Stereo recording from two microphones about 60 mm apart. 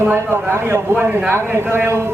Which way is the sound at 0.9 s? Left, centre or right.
Right.